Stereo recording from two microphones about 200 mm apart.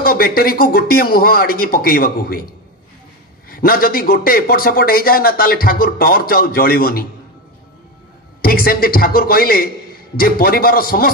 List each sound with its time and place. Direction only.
0.0 s a man's voice: 50° left (ahead or behind)
8.4 s a man's voice: 45° left (ahead or behind)